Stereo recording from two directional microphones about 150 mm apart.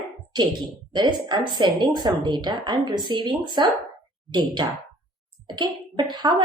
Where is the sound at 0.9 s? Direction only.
30° right (ahead or behind).